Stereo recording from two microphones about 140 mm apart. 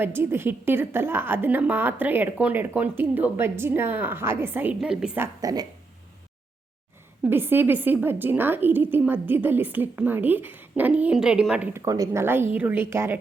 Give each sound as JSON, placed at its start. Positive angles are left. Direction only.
{"t": 0.0, "sound": "a woman's voice", "side_deg": -15}
{"t": 5.2, "sound": "speech", "side_deg": -25}
{"t": 7.3, "sound": "a woman's voice", "side_deg": -15}
{"t": 11.7, "sound": "a woman's voice", "side_deg": -20}